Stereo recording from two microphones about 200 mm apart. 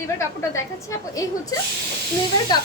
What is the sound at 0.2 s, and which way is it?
A woman's voice, 15° left (ahead or behind).